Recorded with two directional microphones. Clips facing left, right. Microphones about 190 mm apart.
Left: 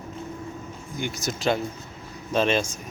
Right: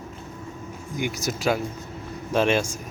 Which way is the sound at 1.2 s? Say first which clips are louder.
Left 1 dB; 10° right (ahead or behind).